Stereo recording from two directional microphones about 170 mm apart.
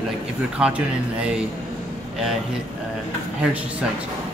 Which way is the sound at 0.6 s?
5° right (ahead or behind).